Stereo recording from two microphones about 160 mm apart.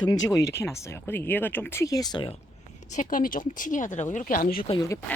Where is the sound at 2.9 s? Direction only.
55° left (ahead or behind).